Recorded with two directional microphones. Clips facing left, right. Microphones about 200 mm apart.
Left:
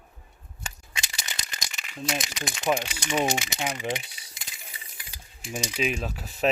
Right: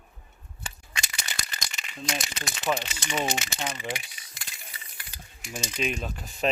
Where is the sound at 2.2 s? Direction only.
15° left (ahead or behind).